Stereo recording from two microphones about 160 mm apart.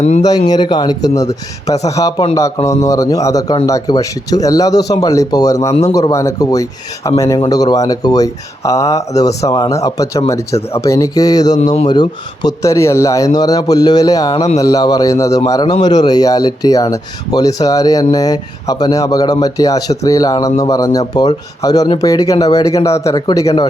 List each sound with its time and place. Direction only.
0.0 s speech: 45° left (ahead or behind)
0.3 s speech: 25° left (ahead or behind)
11.5 s speech: 45° left (ahead or behind)
11.9 s speech: 25° left (ahead or behind)